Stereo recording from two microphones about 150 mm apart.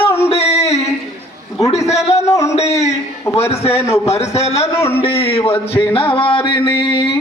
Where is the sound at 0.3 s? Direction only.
45° left (ahead or behind).